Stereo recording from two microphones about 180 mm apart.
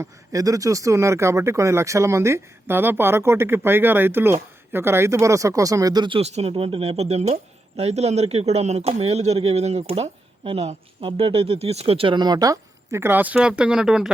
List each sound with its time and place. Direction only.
0.0 s speech: 20° right (ahead or behind); by 14.1 s 5° right (ahead or behind)